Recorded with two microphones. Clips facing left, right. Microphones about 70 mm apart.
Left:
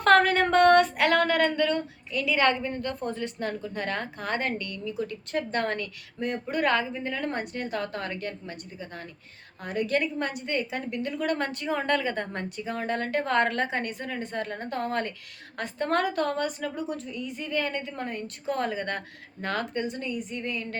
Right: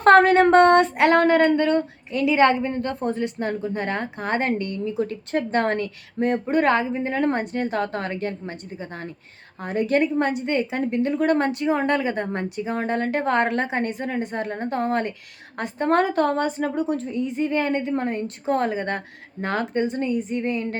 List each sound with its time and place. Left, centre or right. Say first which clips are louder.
0.0 s speech: right 6 dB; right